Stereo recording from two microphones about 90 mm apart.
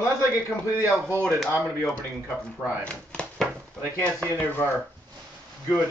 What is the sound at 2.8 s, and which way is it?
Speech, 10° left (ahead or behind).